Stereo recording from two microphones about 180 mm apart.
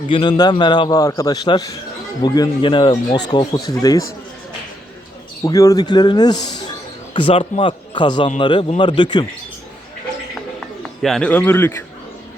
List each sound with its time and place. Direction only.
0.1 s a man's voice: 25° left (ahead or behind)
5.4 s a man's voice: 20° left (ahead or behind)
11.0 s a man's voice: 5° left (ahead or behind)